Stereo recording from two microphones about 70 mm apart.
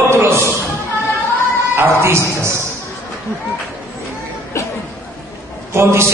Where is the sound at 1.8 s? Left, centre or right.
Right.